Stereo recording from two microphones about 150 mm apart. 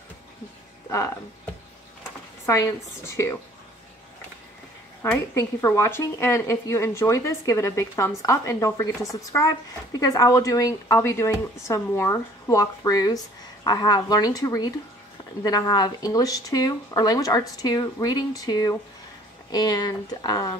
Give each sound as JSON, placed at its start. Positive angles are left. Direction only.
{"t": 0.8, "sound": "speech", "side_deg": 20}
{"t": 5.0, "sound": "speech", "side_deg": 20}